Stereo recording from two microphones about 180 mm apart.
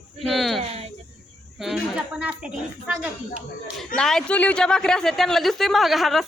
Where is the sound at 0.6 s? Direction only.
35° right (ahead or behind).